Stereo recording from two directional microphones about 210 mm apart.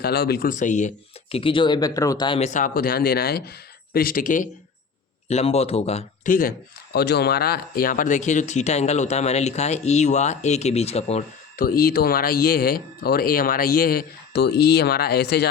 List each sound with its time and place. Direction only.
0.0 s speech: 50° left (ahead or behind); by 2.5 s 25° left (ahead or behind)
2.5 s speech: 40° left (ahead or behind)
6.9 s speech: 50° left (ahead or behind); by 11.2 s 30° left (ahead or behind)
11.5 s speech: 45° left (ahead or behind)